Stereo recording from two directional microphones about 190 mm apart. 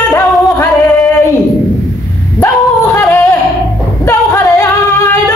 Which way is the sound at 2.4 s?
10° left (ahead or behind).